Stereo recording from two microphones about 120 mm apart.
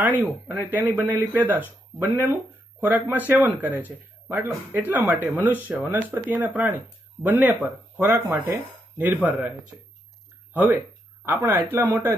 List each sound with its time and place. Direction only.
0.6 s speech: 15° right (ahead or behind)
10.5 s speech: 15° right (ahead or behind)